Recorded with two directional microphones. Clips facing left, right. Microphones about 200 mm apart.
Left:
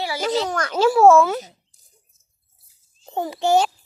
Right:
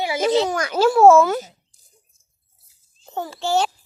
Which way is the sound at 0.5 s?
10° right (ahead or behind).